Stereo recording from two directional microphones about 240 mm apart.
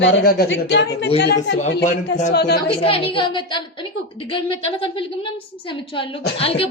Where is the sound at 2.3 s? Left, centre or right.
Left.